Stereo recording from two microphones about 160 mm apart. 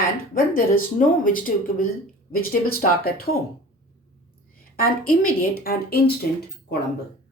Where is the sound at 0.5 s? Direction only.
60° left (ahead or behind).